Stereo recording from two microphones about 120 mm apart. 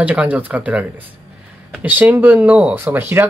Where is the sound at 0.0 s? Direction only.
10° right (ahead or behind).